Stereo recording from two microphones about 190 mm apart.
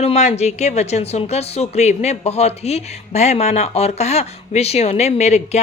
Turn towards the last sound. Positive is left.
turn(degrees=35)  # may be behind; listen again after turning